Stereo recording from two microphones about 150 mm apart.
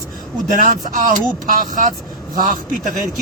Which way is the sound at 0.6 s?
60° right (ahead or behind).